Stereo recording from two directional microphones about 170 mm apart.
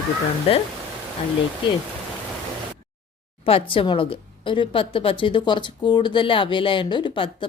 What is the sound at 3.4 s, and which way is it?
A woman's voice, 35° left (ahead or behind).